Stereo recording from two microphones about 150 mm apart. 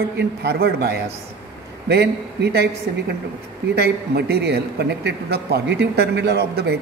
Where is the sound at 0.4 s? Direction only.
90° right.